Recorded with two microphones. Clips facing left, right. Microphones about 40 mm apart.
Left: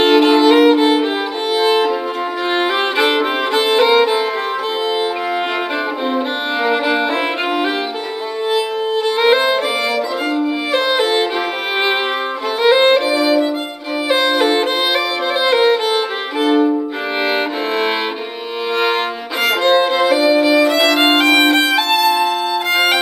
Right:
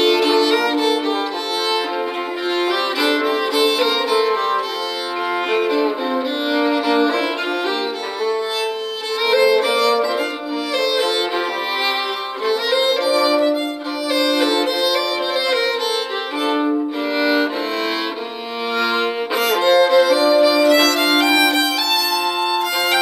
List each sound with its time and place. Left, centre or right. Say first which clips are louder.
0.0 s violin: left 4 dB; left
6.5 s violin: left 1 dB; left
9.1 s violin: even; left
12.4 s violin: left 6 dB; left
17.2 s violin: right 1 dB; left
19.6 s violin: right 1 dB; left